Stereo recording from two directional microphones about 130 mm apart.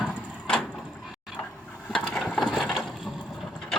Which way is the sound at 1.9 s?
5° left (ahead or behind).